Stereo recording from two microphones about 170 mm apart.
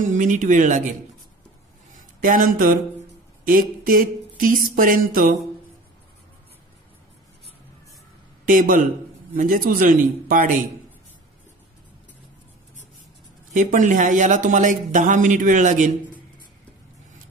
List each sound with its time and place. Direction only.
0.0 s speech: 50° right (ahead or behind)
2.0 s speech: 50° right (ahead or behind)
3.4 s a sound: 55° right (ahead or behind)
8.5 s speech: 55° right (ahead or behind)
9.3 s a sound: 55° right (ahead or behind)
13.5 s speech: 50° right (ahead or behind)